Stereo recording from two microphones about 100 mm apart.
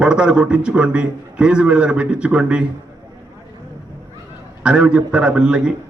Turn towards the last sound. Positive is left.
turn(degrees=-10)  # may be behind; listen again after turning